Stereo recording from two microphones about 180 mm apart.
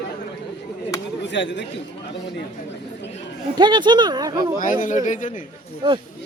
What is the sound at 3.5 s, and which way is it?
Speech, 25° right (ahead or behind).